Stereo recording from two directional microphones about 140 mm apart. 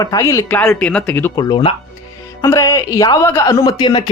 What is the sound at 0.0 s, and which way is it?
Speech, 25° left (ahead or behind).